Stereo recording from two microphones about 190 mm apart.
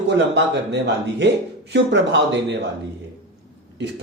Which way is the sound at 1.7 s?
65° right (ahead or behind).